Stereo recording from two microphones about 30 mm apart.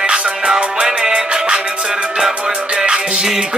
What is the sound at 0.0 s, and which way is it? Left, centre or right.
Music, right.